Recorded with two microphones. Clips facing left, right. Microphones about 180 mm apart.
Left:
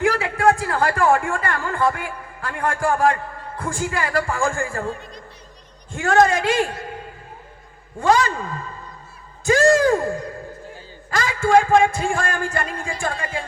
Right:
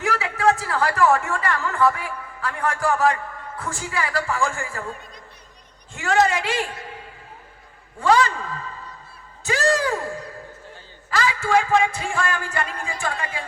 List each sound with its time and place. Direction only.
0.2 s a man's voice: 55° left (ahead or behind)
5.9 s a man's voice: 50° left (ahead or behind)
8.0 s a man's voice: 45° left (ahead or behind)